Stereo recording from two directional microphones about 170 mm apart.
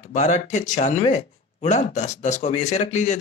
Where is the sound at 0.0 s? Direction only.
45° left (ahead or behind).